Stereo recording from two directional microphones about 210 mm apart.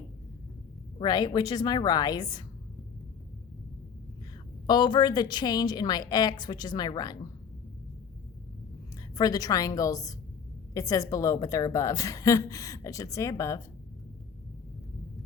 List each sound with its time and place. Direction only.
0.9 s a woman's voice: 20° left (ahead or behind)
4.6 s a woman's voice: 20° left (ahead or behind)
9.1 s a woman's voice: 15° left (ahead or behind)